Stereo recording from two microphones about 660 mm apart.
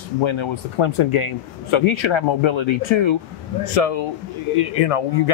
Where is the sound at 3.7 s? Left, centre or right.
Left.